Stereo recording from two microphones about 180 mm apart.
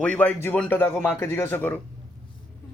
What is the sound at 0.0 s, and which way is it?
Speech, 10° left (ahead or behind).